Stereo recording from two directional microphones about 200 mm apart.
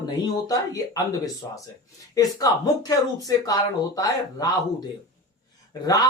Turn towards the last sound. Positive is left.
turn(degrees=20)  # may be behind; listen again after turning